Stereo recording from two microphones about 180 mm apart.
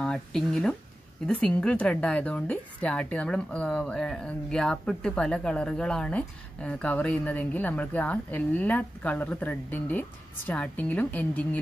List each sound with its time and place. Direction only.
0.0 s a woman's voice: 5° left (ahead or behind)